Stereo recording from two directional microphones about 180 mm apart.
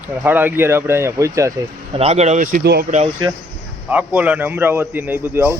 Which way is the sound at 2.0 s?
35° right (ahead or behind).